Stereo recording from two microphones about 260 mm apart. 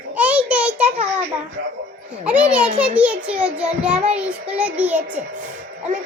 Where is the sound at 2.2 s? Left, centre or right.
Centre.